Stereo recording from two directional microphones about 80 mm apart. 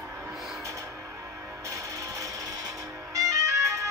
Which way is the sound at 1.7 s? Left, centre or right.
Right.